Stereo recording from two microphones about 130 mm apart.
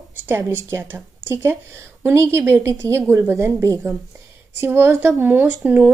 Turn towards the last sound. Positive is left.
turn(degrees=-10)  # may be behind; listen again after turning